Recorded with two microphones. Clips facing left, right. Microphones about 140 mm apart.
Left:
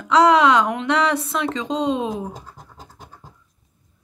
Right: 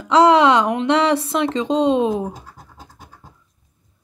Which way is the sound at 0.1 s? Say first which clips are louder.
Right 2 dB; 30° right (ahead or behind).